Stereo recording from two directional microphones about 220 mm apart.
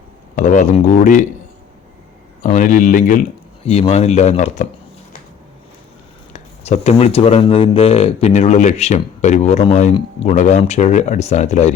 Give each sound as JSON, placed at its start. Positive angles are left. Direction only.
{"t": 0.3, "sound": "speech", "side_deg": 35}
{"t": 2.4, "sound": "speech", "side_deg": 35}
{"t": 6.3, "sound": "speech", "side_deg": 30}